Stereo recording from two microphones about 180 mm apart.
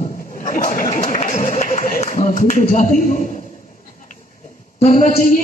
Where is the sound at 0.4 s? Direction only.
45° left (ahead or behind).